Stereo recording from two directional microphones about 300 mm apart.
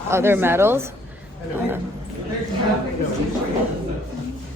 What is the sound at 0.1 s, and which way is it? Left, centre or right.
Speech, centre.